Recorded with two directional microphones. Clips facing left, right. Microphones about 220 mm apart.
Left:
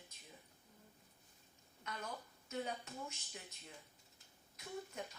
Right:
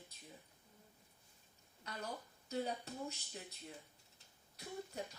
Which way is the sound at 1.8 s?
35° right (ahead or behind).